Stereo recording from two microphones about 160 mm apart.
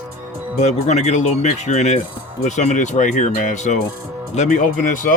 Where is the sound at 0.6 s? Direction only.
45° left (ahead or behind).